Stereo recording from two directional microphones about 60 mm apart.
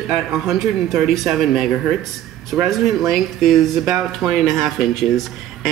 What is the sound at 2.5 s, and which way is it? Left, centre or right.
Speech, centre.